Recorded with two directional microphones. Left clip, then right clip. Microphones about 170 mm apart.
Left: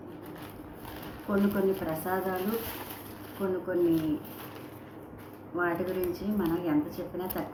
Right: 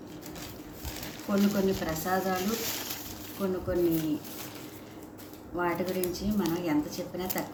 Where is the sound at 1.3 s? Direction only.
35° right (ahead or behind).